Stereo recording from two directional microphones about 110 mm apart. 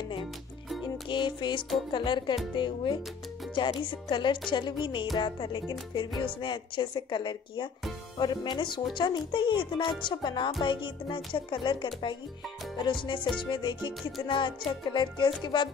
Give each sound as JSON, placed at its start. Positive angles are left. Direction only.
{"t": 0.8, "sound": "music", "side_deg": 45}